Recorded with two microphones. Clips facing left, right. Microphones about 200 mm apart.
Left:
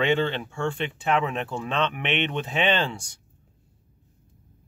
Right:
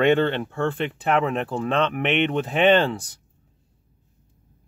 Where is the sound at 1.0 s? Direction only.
40° right (ahead or behind).